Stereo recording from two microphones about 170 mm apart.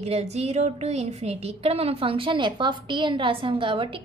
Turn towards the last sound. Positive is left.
turn(degrees=-30)  # may be behind; listen again after turning